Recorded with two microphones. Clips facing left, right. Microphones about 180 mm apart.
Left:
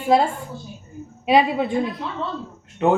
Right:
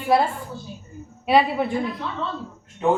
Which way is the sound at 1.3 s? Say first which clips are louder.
Left 1 dB; 20° left (ahead or behind).